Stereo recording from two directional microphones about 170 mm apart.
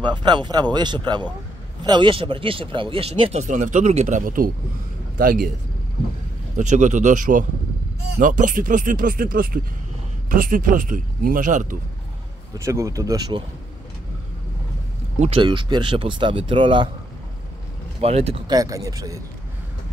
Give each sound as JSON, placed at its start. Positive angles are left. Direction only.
{"t": 0.0, "sound": "a man's voice", "side_deg": -25}
{"t": 6.5, "sound": "speech", "side_deg": -45}
{"t": 12.5, "sound": "speech", "side_deg": -15}
{"t": 15.1, "sound": "speech", "side_deg": -40}
{"t": 15.4, "sound": "speech", "side_deg": -25}
{"t": 18.0, "sound": "speech", "side_deg": -35}
{"t": 18.5, "sound": "speech", "side_deg": -20}